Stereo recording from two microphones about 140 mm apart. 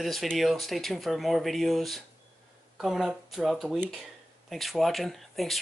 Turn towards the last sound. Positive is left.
turn(degrees=0)  # may be behind; listen again after turning